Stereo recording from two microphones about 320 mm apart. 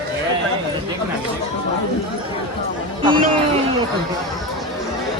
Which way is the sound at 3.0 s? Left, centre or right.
Centre.